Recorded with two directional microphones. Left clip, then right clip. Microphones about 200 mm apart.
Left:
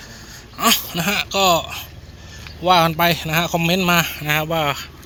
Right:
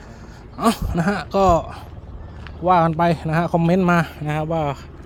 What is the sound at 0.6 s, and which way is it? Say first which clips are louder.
A man's voice: left 3 dB; 25° right (ahead or behind).